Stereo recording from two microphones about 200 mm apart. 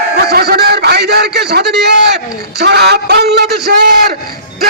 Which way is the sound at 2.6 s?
55° right (ahead or behind).